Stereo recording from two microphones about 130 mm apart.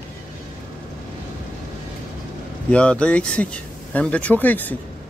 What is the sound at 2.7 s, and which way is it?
Speech, 10° left (ahead or behind).